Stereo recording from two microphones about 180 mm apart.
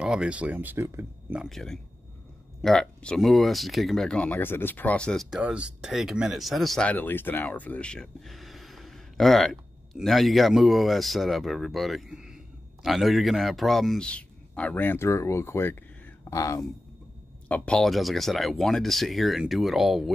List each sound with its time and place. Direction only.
0.0 s speech: 5° right (ahead or behind)
1.4 s speech: centre (ahead or behind); by 16.6 s 20° left (ahead or behind)
17.5 s speech: 5° left (ahead or behind)